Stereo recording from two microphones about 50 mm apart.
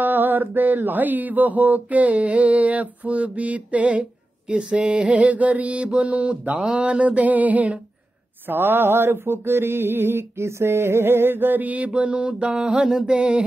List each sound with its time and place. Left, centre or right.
0.0 s mantra: right
8.5 s mantra: right
10.4 s mantra: right; by 13.4 s centre